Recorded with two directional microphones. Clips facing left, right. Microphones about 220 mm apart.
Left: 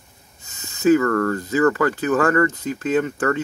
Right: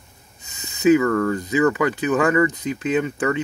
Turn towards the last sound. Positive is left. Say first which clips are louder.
# left 1 dB
turn(degrees=-10)  # may be behind; listen again after turning